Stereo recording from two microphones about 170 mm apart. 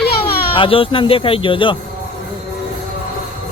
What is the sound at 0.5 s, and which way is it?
Speech, 30° left (ahead or behind).